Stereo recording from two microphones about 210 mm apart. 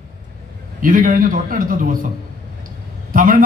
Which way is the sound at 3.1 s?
40° right (ahead or behind).